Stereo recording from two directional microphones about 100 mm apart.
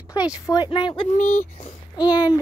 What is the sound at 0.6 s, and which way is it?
Speech, 55° left (ahead or behind).